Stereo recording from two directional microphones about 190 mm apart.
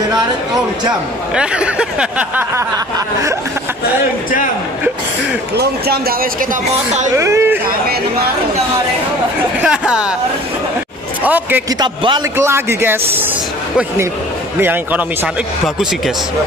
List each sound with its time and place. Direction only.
1.3 s speech: 5° right (ahead or behind)
5.6 s speech: 55° right (ahead or behind)
7.2 s speech: 15° right (ahead or behind)
9.6 s speech: 5° right (ahead or behind)
11.2 s speech: 10° right (ahead or behind)
11.8 s speech: 25° right (ahead or behind)
14.6 s speech: 10° right (ahead or behind)